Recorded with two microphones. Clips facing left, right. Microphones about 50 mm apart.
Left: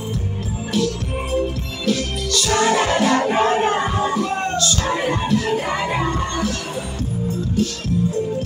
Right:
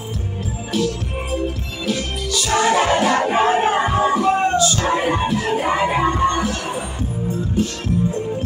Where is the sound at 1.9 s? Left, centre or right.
Centre.